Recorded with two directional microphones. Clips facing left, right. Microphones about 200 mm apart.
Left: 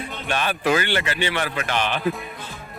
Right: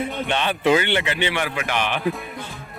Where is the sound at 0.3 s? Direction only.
20° right (ahead or behind).